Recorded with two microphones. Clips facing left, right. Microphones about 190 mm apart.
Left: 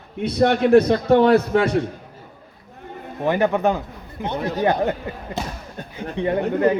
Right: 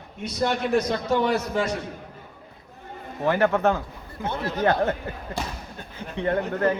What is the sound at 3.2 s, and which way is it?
A man's voice, 15° left (ahead or behind).